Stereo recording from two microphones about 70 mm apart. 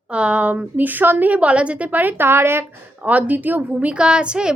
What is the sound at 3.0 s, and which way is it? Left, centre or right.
A woman's voice, right.